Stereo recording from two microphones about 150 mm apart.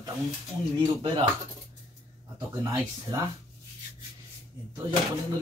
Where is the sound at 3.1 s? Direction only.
30° right (ahead or behind).